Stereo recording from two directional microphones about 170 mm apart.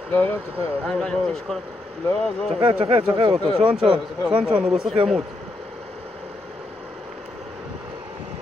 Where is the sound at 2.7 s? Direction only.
35° right (ahead or behind).